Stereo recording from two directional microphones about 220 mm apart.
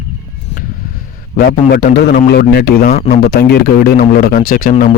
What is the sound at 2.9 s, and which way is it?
Speech, 30° left (ahead or behind).